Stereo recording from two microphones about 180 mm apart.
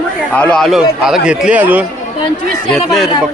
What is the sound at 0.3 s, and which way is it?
A man's voice, 5° left (ahead or behind).